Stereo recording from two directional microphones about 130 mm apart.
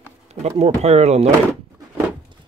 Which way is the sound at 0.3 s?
55° right (ahead or behind).